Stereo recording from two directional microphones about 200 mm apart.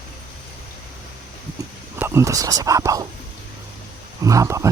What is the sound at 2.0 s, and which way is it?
Speech, 15° right (ahead or behind).